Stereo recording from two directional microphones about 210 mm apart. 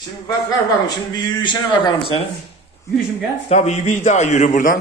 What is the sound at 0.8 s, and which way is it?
Speech, 20° left (ahead or behind).